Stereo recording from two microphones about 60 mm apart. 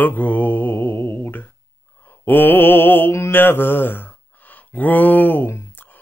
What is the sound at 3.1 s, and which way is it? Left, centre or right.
Mantra, left.